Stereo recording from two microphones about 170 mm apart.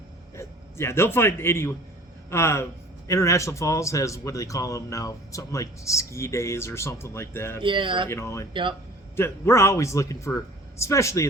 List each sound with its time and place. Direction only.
0.3 s a man's voice: 15° left (ahead or behind)
7.6 s speech: 30° right (ahead or behind)
8.1 s a man's voice: 15° left (ahead or behind)